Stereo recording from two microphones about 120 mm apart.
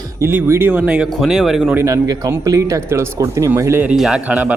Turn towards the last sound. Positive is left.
turn(degrees=-15)  # may be behind; listen again after turning